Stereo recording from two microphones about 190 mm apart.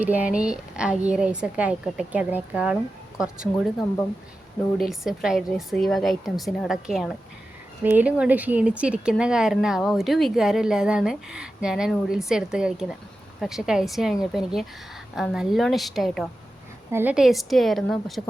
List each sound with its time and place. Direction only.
0.0 s speech: 10° right (ahead or behind)